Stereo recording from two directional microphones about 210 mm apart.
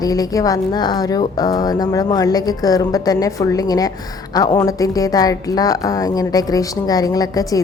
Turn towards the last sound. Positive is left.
turn(degrees=15)  # may be behind; listen again after turning